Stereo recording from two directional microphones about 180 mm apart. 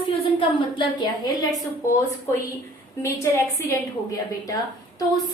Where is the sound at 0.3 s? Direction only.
25° left (ahead or behind).